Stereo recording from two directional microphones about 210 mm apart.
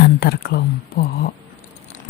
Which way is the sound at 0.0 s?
45° left (ahead or behind).